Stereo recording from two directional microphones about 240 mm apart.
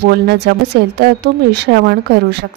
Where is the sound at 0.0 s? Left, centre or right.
Right.